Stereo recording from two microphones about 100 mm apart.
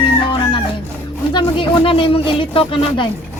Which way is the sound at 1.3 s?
55° left (ahead or behind).